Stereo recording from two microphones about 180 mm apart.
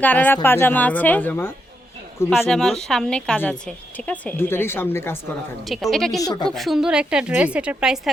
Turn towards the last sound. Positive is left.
turn(degrees=-5)  # may be behind; listen again after turning